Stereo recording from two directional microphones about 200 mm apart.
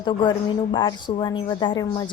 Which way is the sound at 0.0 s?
20° left (ahead or behind).